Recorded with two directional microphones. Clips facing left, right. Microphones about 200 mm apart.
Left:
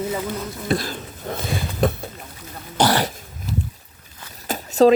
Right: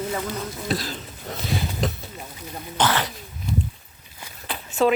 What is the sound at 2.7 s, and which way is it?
Speech, 40° left (ahead or behind).